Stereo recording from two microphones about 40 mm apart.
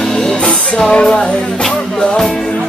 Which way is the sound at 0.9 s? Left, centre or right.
Left.